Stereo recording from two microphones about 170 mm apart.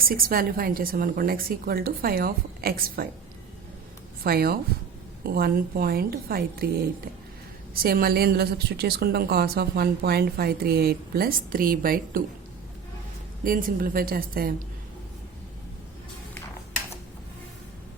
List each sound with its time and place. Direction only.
0.0 s a woman's voice: 60° right (ahead or behind)
4.2 s a woman's voice: 65° right (ahead or behind)
7.7 s a woman's voice: 60° right (ahead or behind)
13.4 s a woman's voice: 55° right (ahead or behind)